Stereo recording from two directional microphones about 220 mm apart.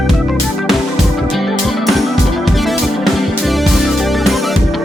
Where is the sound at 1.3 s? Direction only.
Centre (ahead or behind).